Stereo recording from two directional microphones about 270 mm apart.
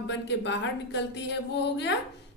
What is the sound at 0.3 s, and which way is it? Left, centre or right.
A woman's voice, left.